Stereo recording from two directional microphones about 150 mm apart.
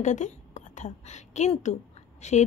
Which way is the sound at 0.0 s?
50° left (ahead or behind).